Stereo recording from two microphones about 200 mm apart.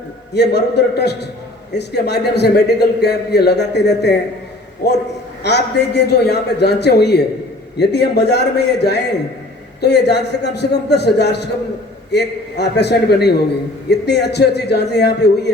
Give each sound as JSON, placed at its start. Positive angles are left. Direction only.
{"t": 0.3, "sound": "a man's voice", "side_deg": 55}